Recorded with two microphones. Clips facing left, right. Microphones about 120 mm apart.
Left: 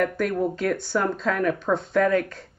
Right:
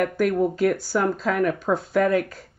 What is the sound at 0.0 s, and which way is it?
Speech, 5° right (ahead or behind).